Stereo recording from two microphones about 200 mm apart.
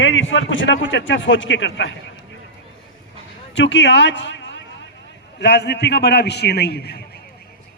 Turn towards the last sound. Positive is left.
turn(degrees=55)  # may be behind; listen again after turning